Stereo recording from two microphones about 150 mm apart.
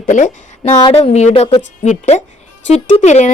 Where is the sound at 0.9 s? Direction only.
45° left (ahead or behind).